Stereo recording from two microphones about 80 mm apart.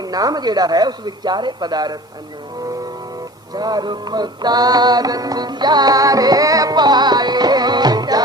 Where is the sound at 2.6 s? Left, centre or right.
Right.